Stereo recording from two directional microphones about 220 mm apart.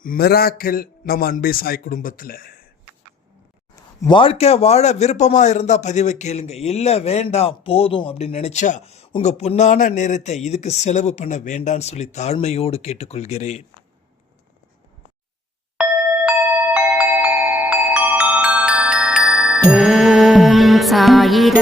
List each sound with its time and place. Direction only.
0.0 s a man's voice: 40° left (ahead or behind)
4.0 s speech: 25° left (ahead or behind)
17.0 s music: 5° right (ahead or behind)